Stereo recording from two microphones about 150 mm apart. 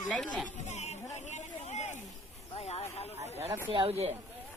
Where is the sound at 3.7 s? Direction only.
40° right (ahead or behind).